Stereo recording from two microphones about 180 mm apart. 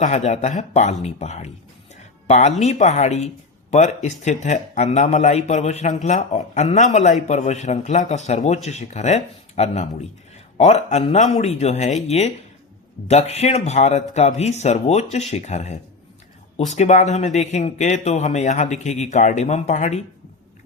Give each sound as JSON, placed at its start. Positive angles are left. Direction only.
{"t": 0.0, "sound": "speech", "side_deg": 40}
{"t": 2.0, "sound": "music", "side_deg": 40}
{"t": 2.6, "sound": "speech", "side_deg": 40}